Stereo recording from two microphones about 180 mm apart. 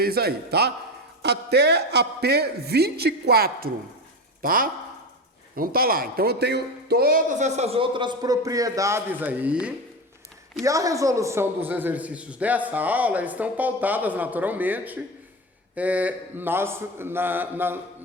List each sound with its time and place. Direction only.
0.0 s a woman's voice: 60° right (ahead or behind); by 9.7 s 5° right (ahead or behind)
10.6 s a man's voice: 20° right (ahead or behind)